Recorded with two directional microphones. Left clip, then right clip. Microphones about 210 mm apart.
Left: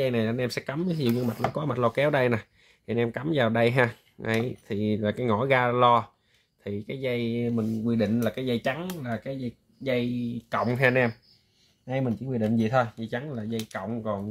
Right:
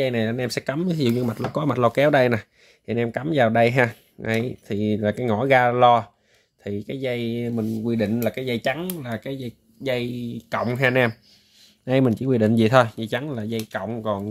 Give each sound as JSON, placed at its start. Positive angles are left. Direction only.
{"t": 0.0, "sound": "speech", "side_deg": -15}
{"t": 10.5, "sound": "speech", "side_deg": -20}
{"t": 11.8, "sound": "speech", "side_deg": -50}